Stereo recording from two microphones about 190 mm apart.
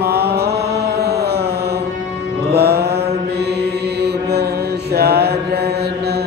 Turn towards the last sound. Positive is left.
turn(degrees=-60)  # may be behind; listen again after turning